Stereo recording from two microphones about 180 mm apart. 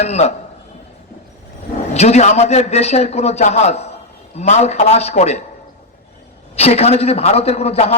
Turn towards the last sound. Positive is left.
turn(degrees=35)  # may be behind; listen again after turning